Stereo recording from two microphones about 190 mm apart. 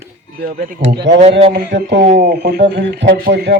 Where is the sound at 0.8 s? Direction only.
70° right (ahead or behind).